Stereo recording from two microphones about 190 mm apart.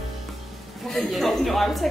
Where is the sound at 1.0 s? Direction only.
Centre (ahead or behind).